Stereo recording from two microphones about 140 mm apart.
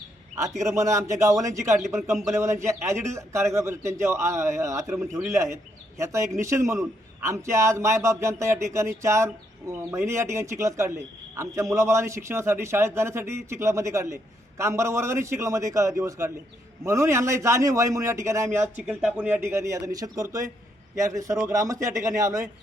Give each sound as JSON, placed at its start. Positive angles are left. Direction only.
{"t": 0.6, "sound": "speech", "side_deg": -20}